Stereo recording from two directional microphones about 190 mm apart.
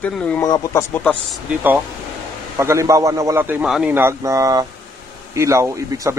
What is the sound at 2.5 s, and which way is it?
A man's voice, 15° right (ahead or behind).